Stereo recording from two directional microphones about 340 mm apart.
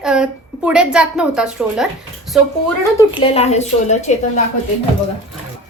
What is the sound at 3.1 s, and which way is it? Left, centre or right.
A woman's voice, centre.